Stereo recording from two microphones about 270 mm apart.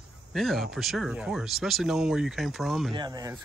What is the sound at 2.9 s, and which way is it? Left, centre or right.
Speech, centre.